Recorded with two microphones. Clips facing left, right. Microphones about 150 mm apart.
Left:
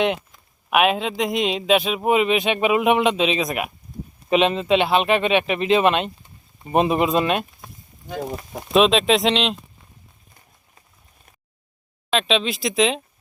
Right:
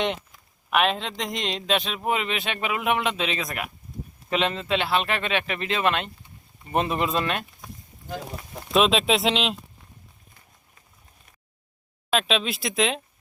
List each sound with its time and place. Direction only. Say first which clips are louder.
0.7 s speech: left 5 dB; 10° left (ahead or behind)
8.7 s speech: left 4 dB; centre (ahead or behind)
12.1 s speech: left 3 dB; 5° right (ahead or behind)